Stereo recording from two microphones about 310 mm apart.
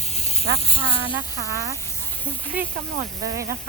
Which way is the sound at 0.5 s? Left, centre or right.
Centre.